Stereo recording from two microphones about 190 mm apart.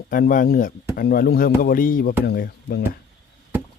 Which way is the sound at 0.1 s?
45° left (ahead or behind).